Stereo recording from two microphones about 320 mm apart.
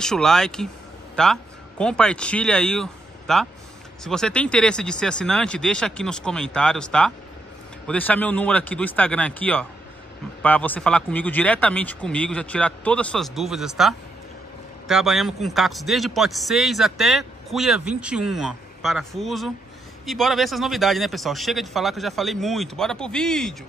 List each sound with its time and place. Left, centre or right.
0.0 s speech: centre